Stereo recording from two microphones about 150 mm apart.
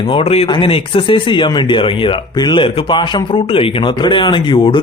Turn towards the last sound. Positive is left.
turn(degrees=35)  # may be behind; listen again after turning